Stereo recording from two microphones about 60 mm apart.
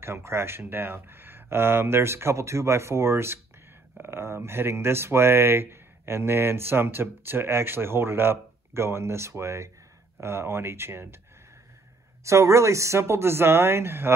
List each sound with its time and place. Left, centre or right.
0.0 s speech: right
12.3 s speech: right